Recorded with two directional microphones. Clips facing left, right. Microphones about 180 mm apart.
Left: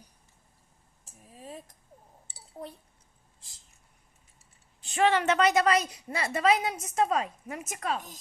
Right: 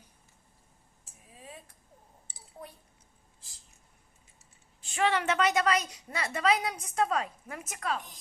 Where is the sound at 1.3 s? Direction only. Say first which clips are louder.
Left 5 dB; 40° left (ahead or behind).